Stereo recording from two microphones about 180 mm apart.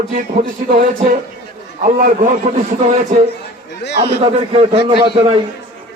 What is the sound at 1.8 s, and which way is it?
Speech, 45° right (ahead or behind).